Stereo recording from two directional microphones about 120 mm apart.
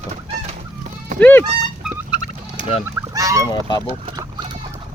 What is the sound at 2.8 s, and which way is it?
Goose, 25° right (ahead or behind).